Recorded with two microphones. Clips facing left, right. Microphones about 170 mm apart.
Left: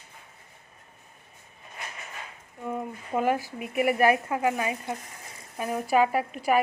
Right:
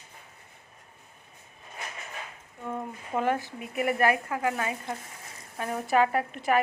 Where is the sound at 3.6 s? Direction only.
20° left (ahead or behind).